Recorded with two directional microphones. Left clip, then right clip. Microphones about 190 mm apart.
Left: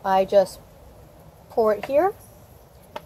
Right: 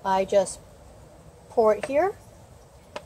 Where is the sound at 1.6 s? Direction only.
15° left (ahead or behind).